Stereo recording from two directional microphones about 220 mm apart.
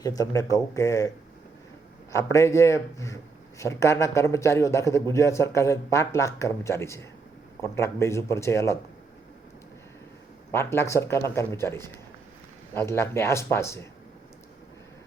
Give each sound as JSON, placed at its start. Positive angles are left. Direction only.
{"t": 0.0, "sound": "a man's voice", "side_deg": 15}
{"t": 2.1, "sound": "a man's voice", "side_deg": 15}
{"t": 10.5, "sound": "a man's voice", "side_deg": 10}